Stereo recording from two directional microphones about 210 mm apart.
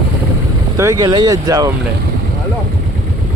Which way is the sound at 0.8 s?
15° right (ahead or behind).